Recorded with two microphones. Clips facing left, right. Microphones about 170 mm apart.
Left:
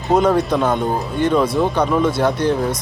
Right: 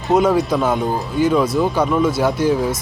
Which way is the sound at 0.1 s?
Centre (ahead or behind).